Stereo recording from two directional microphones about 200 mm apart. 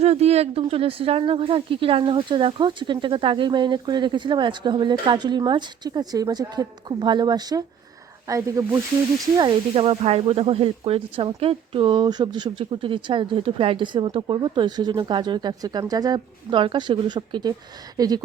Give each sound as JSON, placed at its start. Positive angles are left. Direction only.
{"t": 0.0, "sound": "speech", "side_deg": -30}
{"t": 9.4, "sound": "speech", "side_deg": -30}